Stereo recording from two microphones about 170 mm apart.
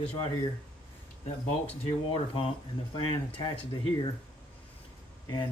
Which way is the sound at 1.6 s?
35° left (ahead or behind).